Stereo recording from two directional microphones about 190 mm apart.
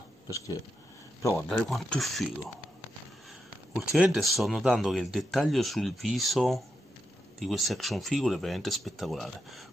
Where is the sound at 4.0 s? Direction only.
Centre (ahead or behind).